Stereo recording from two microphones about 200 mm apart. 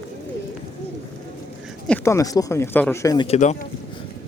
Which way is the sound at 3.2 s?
35° left (ahead or behind).